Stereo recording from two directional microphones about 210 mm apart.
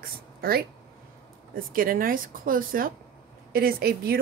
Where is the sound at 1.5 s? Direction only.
40° right (ahead or behind).